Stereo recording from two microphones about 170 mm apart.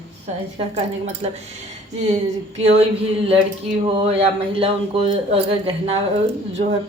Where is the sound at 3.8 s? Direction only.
35° right (ahead or behind).